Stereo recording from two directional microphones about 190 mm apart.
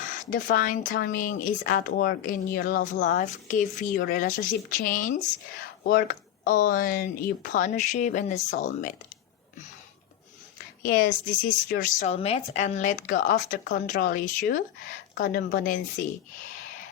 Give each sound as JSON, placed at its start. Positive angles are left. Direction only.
{"t": 0.1, "sound": "speech", "side_deg": 45}
{"t": 10.8, "sound": "speech", "side_deg": 50}